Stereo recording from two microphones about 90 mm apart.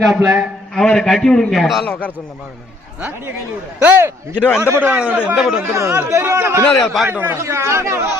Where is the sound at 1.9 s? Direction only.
15° left (ahead or behind).